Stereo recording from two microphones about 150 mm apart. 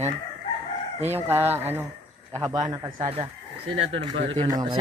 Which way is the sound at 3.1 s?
35° right (ahead or behind).